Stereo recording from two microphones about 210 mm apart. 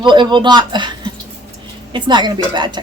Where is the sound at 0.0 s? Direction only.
20° right (ahead or behind).